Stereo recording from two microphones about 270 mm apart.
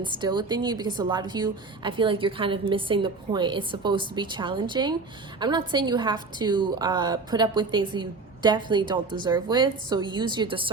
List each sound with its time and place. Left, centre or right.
0.0 s a woman's voice: centre